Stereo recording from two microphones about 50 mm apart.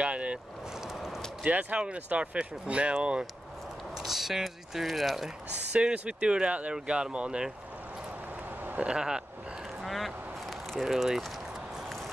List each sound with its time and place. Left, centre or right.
0.0 s vehicle: right
0.9 s a sound: centre
1.4 s speech: right
3.9 s speech: centre
5.7 s speech: centre
8.7 s speech: centre
9.8 s a sound: centre